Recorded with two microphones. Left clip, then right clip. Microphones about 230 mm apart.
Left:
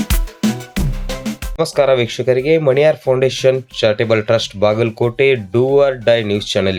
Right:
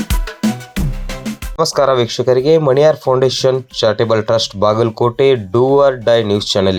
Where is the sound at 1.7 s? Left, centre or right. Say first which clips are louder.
Even; centre.